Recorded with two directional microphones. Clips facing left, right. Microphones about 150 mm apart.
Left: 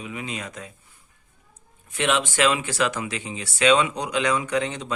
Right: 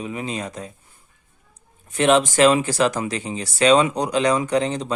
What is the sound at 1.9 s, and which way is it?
Speech, 40° right (ahead or behind).